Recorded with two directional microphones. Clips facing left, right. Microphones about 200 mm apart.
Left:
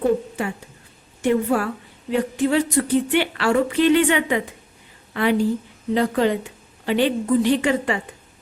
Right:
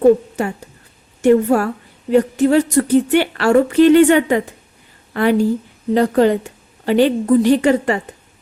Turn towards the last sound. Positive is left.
turn(degrees=-40)  # may be behind; listen again after turning